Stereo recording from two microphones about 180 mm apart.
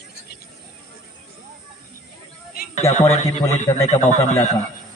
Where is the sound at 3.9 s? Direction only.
40° left (ahead or behind).